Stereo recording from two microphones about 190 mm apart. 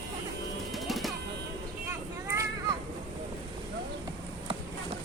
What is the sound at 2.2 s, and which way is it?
Children playing, 15° right (ahead or behind).